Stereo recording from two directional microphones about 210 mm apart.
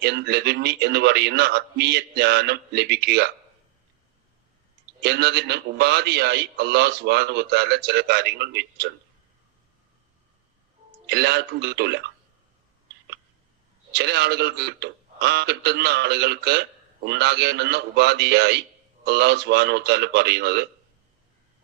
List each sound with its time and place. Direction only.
0.0 s a man's voice: 50° right (ahead or behind)
4.9 s a man's voice: 50° right (ahead or behind)
11.0 s a man's voice: 50° right (ahead or behind)
13.9 s a man's voice: 50° right (ahead or behind)